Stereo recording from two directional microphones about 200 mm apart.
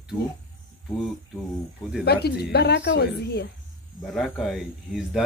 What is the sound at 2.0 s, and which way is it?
Speech, 55° left (ahead or behind).